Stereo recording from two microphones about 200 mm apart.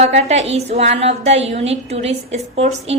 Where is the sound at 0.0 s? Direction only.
35° right (ahead or behind).